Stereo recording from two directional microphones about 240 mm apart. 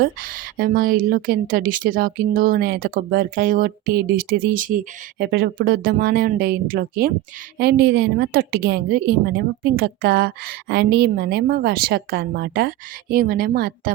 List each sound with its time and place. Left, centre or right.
0.0 s a woman's voice: right